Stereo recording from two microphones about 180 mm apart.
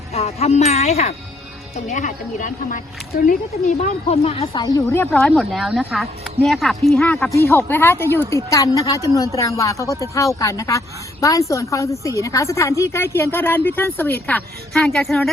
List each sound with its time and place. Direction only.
0.1 s speech: 35° left (ahead or behind)
4.6 s a woman's voice: 15° left (ahead or behind)
5.1 s a woman's voice: centre (ahead or behind)